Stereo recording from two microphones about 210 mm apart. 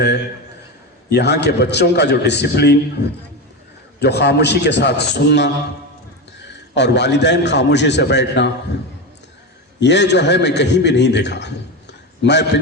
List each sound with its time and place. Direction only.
1.1 s a man's voice: 50° left (ahead or behind)
6.7 s a man's voice: 55° left (ahead or behind)
9.8 s a man's voice: 55° left (ahead or behind)